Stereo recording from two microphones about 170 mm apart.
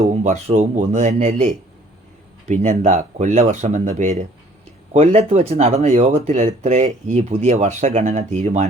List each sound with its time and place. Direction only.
0.0 s speech: 40° right (ahead or behind)